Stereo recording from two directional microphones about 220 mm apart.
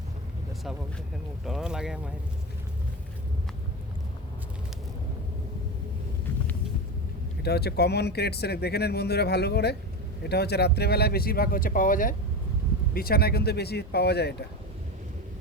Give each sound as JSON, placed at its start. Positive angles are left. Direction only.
{"t": 1.5, "sound": "speech", "side_deg": 0}
{"t": 7.4, "sound": "speech", "side_deg": 45}